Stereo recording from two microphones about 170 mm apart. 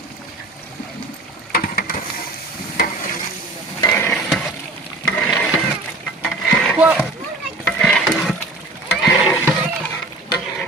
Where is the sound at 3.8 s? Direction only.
15° left (ahead or behind).